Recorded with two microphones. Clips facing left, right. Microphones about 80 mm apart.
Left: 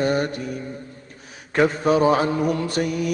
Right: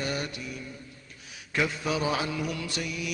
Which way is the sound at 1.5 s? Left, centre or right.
Left.